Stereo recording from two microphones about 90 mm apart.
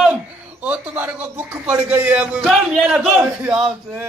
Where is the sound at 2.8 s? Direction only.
10° right (ahead or behind).